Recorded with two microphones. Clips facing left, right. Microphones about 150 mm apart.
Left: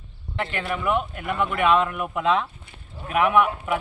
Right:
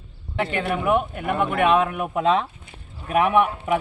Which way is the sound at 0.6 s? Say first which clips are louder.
Right 3 dB; 55° right (ahead or behind).